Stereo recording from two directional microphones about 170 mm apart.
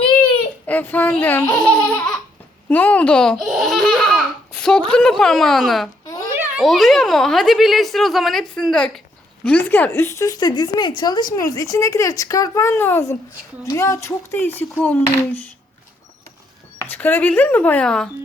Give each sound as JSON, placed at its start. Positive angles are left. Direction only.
{"t": 0.7, "sound": "speech", "side_deg": 10}
{"t": 2.6, "sound": "baby laughter", "side_deg": 10}
{"t": 4.9, "sound": "speech", "side_deg": 5}
{"t": 16.8, "sound": "speech", "side_deg": 10}